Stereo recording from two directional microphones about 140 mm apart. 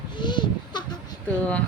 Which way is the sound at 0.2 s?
35° left (ahead or behind).